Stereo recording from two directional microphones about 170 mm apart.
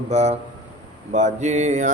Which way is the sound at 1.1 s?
45° right (ahead or behind).